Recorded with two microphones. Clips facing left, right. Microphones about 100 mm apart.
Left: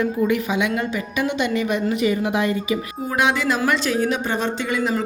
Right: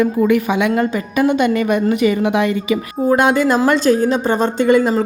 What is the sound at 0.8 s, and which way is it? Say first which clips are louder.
A woman's voice: right 7 dB; 45° right (ahead or behind).